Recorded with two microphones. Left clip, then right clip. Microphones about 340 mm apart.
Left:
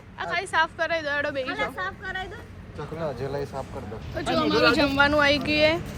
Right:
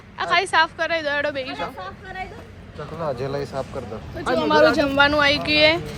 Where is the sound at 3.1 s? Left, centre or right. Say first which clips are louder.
Right 4 dB; right.